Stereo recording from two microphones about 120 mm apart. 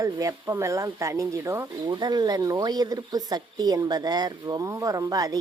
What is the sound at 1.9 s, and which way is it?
Speech, 35° right (ahead or behind).